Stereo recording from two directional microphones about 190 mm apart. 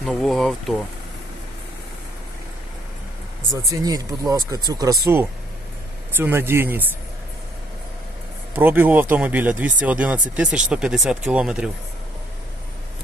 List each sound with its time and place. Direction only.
0.0 s speech: centre (ahead or behind)
3.7 s speech: 20° right (ahead or behind)
8.5 s speech: 10° right (ahead or behind)